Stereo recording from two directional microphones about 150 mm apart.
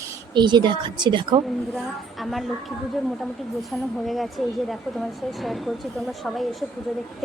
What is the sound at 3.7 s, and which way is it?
Speech, centre (ahead or behind).